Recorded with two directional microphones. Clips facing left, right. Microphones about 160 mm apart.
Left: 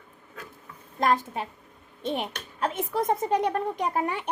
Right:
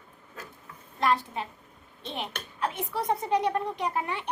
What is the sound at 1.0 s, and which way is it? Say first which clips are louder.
A woman's voice: left 2 dB; 45° left (ahead or behind).